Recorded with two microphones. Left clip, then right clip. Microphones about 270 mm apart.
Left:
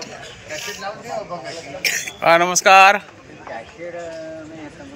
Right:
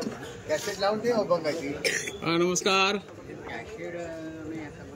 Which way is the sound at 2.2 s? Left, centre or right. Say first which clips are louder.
Left 14 dB; centre.